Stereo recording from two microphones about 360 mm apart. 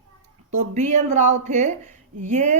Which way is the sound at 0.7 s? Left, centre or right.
Centre.